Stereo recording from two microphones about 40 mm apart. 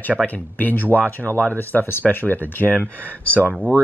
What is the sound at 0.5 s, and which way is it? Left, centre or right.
Speech, left.